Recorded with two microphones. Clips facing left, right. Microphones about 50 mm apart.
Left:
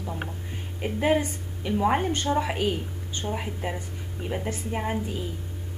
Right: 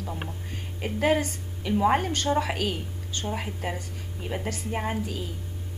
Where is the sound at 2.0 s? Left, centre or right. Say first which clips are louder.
Even; centre.